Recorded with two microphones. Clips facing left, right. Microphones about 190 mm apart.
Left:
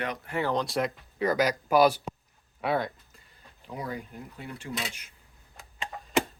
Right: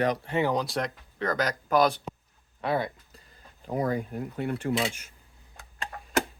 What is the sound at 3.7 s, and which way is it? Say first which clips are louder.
Speech: right 8 dB; 45° right (ahead or behind).